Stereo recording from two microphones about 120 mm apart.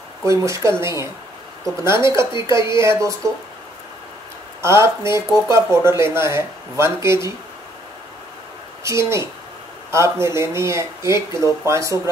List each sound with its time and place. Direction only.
0.2 s speech: 25° right (ahead or behind)
4.6 s speech: 20° right (ahead or behind)
8.8 s speech: 25° right (ahead or behind)